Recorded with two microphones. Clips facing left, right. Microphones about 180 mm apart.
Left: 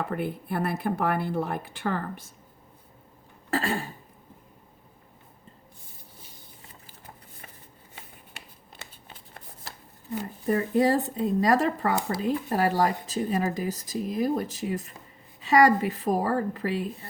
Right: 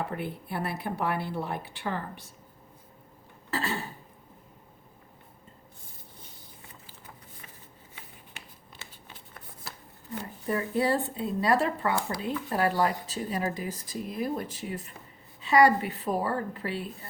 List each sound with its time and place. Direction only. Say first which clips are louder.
0.0 s speech: left 4 dB; 50° left (ahead or behind)
3.5 s speech: left 4 dB; 50° left (ahead or behind)
10.4 s speech: left 5 dB; 40° left (ahead or behind)